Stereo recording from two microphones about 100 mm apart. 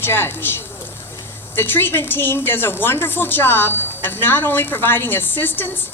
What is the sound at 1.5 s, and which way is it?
A woman's voice, 20° left (ahead or behind).